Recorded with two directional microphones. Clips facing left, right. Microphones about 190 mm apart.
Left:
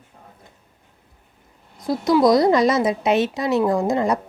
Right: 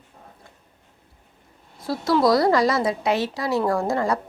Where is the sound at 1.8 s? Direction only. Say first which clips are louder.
Left 3 dB; 20° left (ahead or behind).